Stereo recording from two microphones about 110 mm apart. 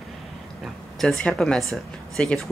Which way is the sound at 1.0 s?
5° left (ahead or behind).